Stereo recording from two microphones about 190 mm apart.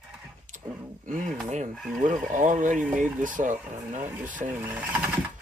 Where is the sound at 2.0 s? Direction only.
45° right (ahead or behind).